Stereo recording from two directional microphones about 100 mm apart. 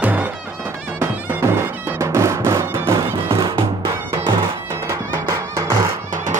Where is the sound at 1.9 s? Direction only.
30° right (ahead or behind).